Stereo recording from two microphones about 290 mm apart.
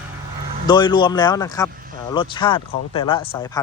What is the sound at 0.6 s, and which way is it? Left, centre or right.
Speech, centre.